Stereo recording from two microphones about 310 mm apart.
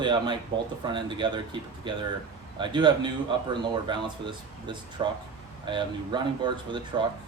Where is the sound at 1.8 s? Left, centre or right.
Centre.